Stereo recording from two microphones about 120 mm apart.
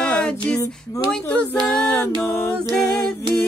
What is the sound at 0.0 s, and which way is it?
A capella, 10° left (ahead or behind).